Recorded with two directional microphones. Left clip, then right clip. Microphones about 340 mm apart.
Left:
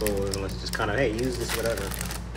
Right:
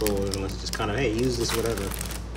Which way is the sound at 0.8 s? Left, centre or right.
Centre.